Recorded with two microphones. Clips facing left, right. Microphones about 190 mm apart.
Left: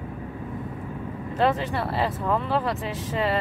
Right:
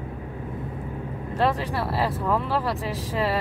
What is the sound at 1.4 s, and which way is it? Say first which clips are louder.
Speech: left 1 dB; centre (ahead or behind).